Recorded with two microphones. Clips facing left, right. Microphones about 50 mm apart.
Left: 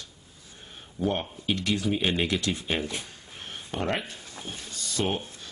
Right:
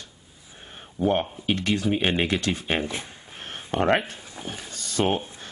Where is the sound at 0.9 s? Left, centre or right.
Right.